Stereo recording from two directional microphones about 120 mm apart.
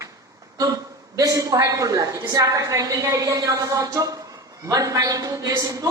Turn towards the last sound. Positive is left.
turn(degrees=-30)  # may be behind; listen again after turning